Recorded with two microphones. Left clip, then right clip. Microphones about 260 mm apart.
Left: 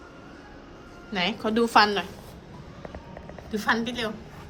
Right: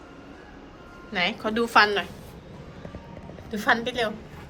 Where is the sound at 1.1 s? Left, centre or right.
Centre.